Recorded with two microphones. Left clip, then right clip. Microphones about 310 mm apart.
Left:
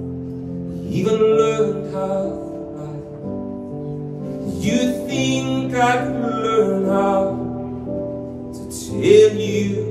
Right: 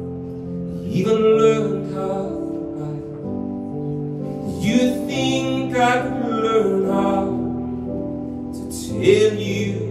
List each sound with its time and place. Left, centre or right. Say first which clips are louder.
0.9 s music: left 1 dB; centre
4.6 s music: right 1 dB; centre
9.0 s music: left 4 dB; centre